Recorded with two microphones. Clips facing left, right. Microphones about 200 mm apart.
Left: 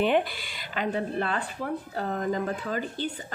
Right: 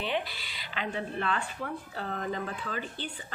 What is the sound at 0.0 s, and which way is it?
A woman's voice, 50° left (ahead or behind).